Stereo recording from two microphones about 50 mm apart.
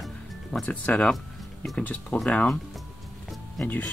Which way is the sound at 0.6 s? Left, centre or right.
Left.